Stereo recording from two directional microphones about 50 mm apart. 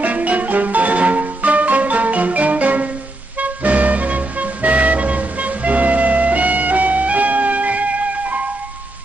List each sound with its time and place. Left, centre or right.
0.0 s music: right